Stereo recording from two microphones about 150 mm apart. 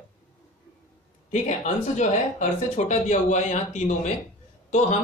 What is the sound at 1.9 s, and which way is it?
A man's voice, 50° left (ahead or behind).